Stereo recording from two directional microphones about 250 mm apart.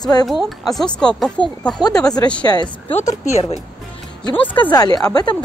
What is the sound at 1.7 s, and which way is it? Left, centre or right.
Speech, centre.